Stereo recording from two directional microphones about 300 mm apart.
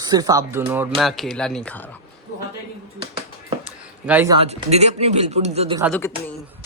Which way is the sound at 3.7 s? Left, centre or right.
Centre.